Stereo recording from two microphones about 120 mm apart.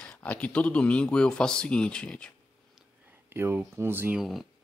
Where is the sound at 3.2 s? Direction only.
20° right (ahead or behind).